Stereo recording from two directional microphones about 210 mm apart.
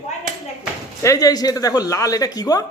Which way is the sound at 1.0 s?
15° left (ahead or behind).